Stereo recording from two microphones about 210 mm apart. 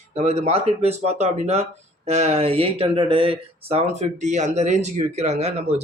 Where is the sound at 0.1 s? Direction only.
30° right (ahead or behind).